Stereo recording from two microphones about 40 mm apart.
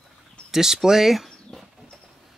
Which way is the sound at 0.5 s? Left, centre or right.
Centre.